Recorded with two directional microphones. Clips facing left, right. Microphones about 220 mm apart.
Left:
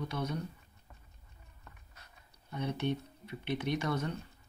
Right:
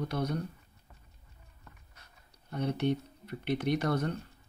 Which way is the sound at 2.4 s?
45° right (ahead or behind).